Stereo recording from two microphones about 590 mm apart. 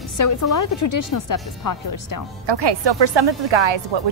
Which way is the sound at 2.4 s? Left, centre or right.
Right.